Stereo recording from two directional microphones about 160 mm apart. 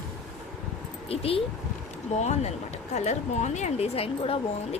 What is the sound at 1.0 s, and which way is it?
A woman's voice, 35° left (ahead or behind).